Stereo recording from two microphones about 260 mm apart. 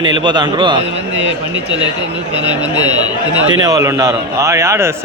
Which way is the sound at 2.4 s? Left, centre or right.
Centre.